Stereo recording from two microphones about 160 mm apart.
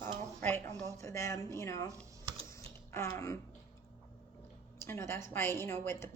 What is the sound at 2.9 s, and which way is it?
Speech, 15° left (ahead or behind).